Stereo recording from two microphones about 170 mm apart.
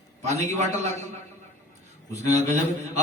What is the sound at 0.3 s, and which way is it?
Speech, 40° right (ahead or behind).